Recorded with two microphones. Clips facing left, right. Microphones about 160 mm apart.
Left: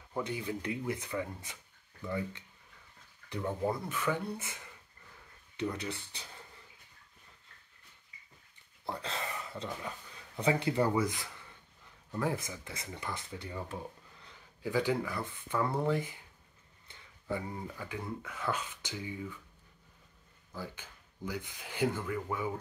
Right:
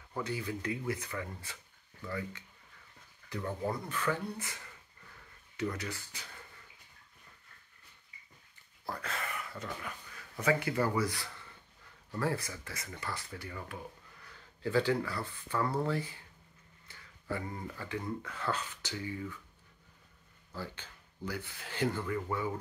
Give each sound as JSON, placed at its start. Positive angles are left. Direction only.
{"t": 0.1, "sound": "speech", "side_deg": 20}
{"t": 3.3, "sound": "speech", "side_deg": 10}
{"t": 5.6, "sound": "speech", "side_deg": 20}
{"t": 8.8, "sound": "speech", "side_deg": 25}
{"t": 14.3, "sound": "speech", "side_deg": 15}
{"t": 16.8, "sound": "a sound", "side_deg": 20}
{"t": 17.5, "sound": "speech", "side_deg": 10}
{"t": 20.5, "sound": "speech", "side_deg": 10}